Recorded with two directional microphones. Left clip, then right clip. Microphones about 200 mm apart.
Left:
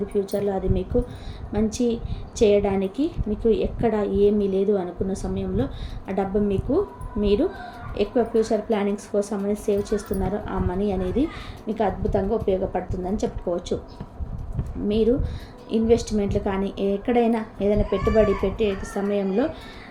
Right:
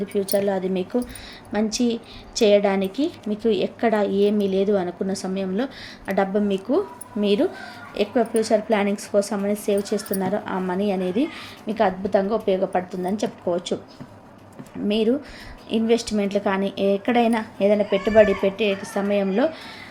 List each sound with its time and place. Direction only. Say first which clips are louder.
0.1 s a woman's voice: right 4 dB; 15° right (ahead or behind)
14.8 s a woman's voice: even; 15° right (ahead or behind)